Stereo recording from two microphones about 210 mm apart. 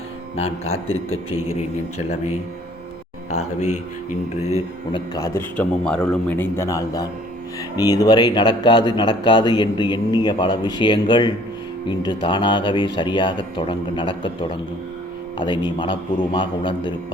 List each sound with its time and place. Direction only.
0.3 s speech: 30° left (ahead or behind)
0.9 s a man's voice: 75° left (ahead or behind)
1.5 s a man's voice: 30° left (ahead or behind)
3.2 s a man's voice: 35° left (ahead or behind)
15.4 s speech: 20° left (ahead or behind)